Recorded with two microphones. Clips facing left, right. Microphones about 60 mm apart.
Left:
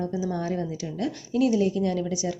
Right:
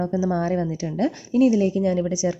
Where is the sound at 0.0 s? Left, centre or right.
Right.